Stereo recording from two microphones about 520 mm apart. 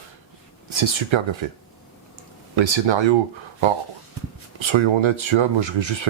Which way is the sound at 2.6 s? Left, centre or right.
Right.